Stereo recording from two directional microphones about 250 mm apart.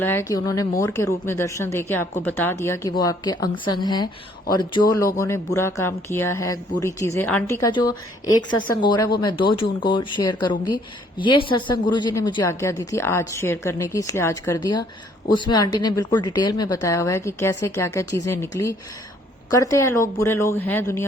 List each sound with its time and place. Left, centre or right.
0.0 s speech: centre